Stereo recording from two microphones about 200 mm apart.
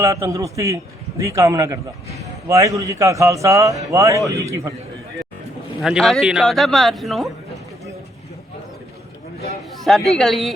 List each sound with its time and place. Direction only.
0.0 s a man's voice: 15° right (ahead or behind)
5.8 s a man's voice: centre (ahead or behind)
10.1 s a man's voice: centre (ahead or behind)